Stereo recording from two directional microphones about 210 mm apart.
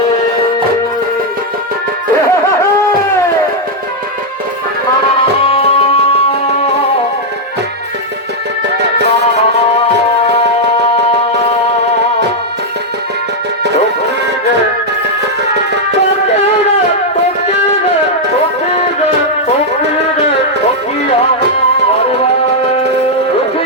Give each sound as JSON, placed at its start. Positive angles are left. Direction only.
{"t": 5.5, "sound": "tabla", "side_deg": 25}